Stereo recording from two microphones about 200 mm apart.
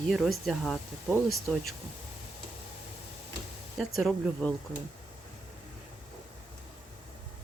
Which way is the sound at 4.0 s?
5° left (ahead or behind).